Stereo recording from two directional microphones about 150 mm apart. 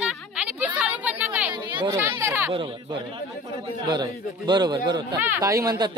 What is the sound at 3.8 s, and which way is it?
Speech, 30° right (ahead or behind).